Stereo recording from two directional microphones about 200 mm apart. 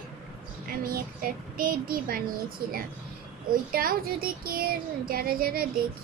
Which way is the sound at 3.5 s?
45° right (ahead or behind).